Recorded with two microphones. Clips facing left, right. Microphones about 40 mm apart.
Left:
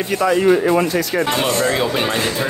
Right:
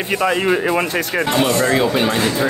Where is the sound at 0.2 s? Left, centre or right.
Right.